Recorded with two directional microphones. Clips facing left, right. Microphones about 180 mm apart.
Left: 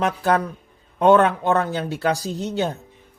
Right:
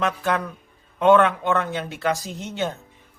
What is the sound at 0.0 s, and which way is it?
Speech, 40° left (ahead or behind).